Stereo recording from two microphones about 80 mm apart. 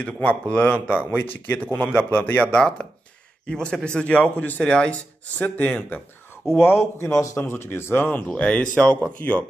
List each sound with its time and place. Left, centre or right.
0.0 s a man's voice: centre
6.6 s speech: left; by 8.9 s centre